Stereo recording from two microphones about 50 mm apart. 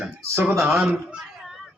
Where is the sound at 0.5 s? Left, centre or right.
Centre.